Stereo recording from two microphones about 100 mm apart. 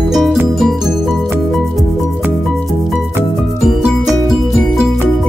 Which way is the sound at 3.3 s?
5° right (ahead or behind).